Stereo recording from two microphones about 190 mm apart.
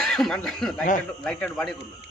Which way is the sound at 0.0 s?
Centre (ahead or behind).